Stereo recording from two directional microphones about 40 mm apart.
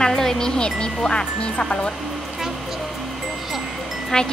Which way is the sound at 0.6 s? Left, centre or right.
Left.